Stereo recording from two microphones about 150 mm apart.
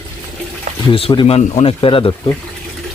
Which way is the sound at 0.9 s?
35° left (ahead or behind).